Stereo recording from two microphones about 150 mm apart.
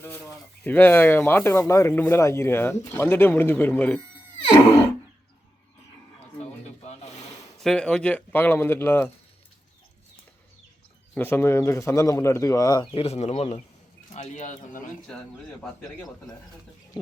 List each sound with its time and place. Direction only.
0.0 s speech: 15° left (ahead or behind)
7.6 s speech: 5° left (ahead or behind)
11.1 s a man's voice: 15° left (ahead or behind)
12.9 s speech: 40° left (ahead or behind); by 14.8 s 60° left (ahead or behind)